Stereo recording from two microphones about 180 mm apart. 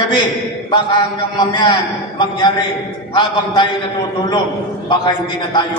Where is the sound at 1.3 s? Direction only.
25° left (ahead or behind).